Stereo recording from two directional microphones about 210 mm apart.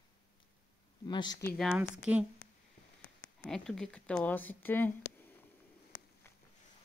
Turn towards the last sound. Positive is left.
turn(degrees=10)  # may be behind; listen again after turning